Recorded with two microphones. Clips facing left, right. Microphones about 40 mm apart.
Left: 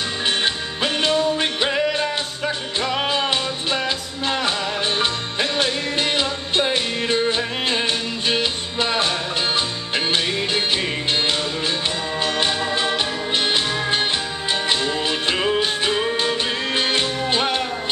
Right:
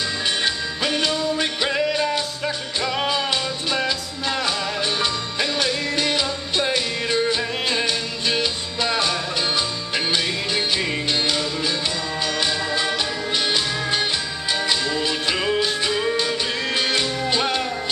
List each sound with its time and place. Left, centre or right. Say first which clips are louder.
0.4 s music: left 1 dB; left
3.1 s music: left 1 dB; left